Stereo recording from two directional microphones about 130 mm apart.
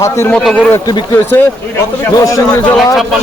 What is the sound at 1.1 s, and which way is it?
A man's voice, 15° left (ahead or behind).